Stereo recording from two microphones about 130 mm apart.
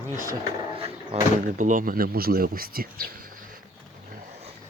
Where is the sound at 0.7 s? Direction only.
50° right (ahead or behind).